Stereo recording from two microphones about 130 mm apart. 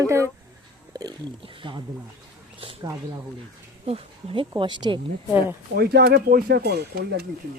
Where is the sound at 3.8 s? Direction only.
45° right (ahead or behind).